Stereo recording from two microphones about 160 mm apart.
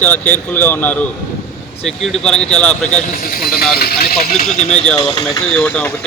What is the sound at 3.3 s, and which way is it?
Speech, 65° left (ahead or behind).